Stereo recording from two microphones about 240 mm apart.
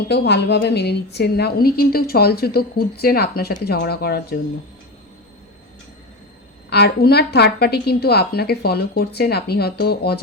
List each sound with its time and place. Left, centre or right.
0.1 s a woman's voice: left
6.7 s a woman's voice: left